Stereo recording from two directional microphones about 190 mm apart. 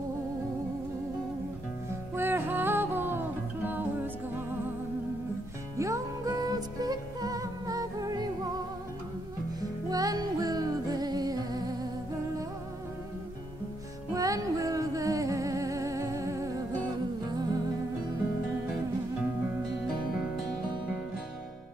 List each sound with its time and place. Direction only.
2.1 s music: 10° right (ahead or behind)
5.8 s music: 15° right (ahead or behind)
9.8 s music: 20° right (ahead or behind)
14.1 s music: 20° right (ahead or behind)